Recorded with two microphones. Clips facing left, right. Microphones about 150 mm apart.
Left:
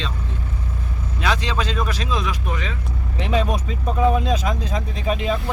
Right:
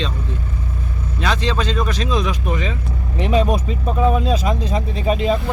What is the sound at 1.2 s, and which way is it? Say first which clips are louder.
Speech: right 2 dB; 10° left (ahead or behind).